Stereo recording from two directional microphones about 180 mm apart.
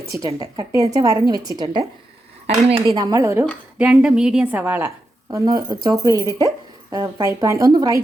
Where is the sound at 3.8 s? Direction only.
5° right (ahead or behind).